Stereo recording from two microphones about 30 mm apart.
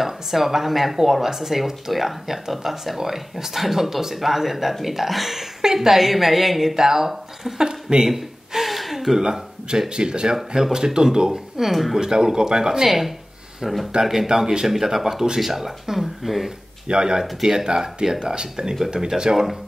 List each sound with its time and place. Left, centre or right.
0.0 s speech: centre
8.0 s gasp: centre
9.9 s speech: right
11.7 s speech: centre
12.0 s speech: right
12.8 s speech: centre
13.9 s speech: centre
14.7 s speech: centre
16.8 s speech: right
17.2 s speech: centre